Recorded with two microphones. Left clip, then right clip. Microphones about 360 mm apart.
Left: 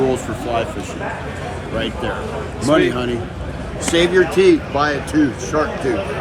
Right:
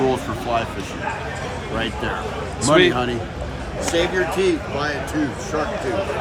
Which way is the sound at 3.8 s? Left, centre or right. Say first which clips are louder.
Left 5 dB; centre.